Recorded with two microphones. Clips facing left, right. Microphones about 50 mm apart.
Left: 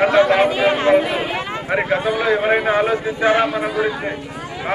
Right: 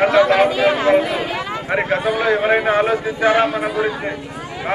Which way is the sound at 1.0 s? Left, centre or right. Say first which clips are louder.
Even; left.